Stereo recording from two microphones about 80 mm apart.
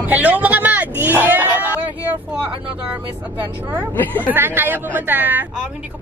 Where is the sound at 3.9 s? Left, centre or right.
Left.